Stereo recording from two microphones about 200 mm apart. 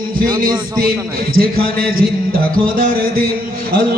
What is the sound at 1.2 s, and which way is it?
Speech, 50° right (ahead or behind).